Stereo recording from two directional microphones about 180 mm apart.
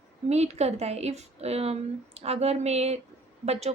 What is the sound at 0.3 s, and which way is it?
A woman's voice, 35° right (ahead or behind).